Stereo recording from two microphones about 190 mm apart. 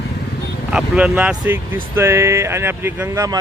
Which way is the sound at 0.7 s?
5° right (ahead or behind).